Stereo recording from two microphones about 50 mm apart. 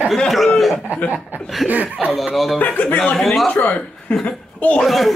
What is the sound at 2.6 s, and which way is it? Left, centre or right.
Speech, left.